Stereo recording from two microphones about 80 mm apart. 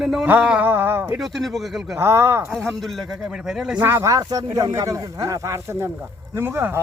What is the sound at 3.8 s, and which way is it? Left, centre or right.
Speech, right.